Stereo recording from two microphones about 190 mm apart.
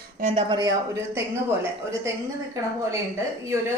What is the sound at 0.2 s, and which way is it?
Speech, 40° right (ahead or behind).